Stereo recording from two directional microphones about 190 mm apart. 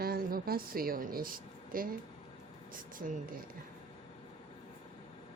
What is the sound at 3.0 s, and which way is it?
Speech, 45° right (ahead or behind).